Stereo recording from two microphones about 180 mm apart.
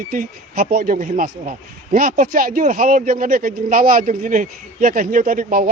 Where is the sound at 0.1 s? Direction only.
50° right (ahead or behind).